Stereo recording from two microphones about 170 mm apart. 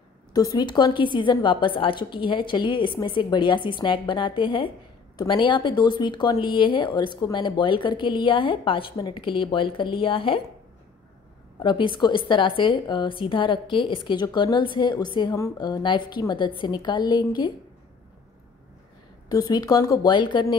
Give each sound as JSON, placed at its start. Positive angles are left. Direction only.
{"t": 0.3, "sound": "a woman's voice", "side_deg": 20}
{"t": 11.6, "sound": "a woman's voice", "side_deg": 30}
{"t": 19.2, "sound": "a woman's voice", "side_deg": 20}